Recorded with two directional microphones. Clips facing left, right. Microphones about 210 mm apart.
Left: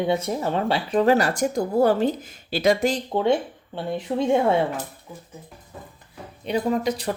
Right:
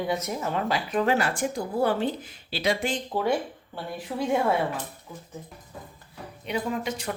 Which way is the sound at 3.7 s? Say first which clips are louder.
Left 7 dB; 25° left (ahead or behind).